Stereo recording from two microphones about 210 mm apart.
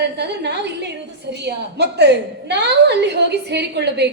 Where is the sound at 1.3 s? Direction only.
55° right (ahead or behind).